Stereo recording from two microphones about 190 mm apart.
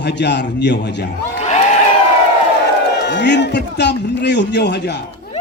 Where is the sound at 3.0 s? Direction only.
65° left (ahead or behind).